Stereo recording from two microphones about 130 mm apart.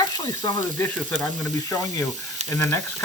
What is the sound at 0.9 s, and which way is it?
Speech, 10° left (ahead or behind).